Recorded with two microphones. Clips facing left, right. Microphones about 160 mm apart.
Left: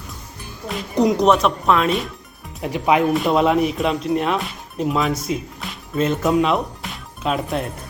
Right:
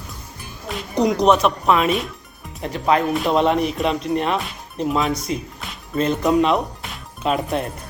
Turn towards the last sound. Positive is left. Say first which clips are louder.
# right 1 dB
turn(degrees=0)  # may be behind; listen again after turning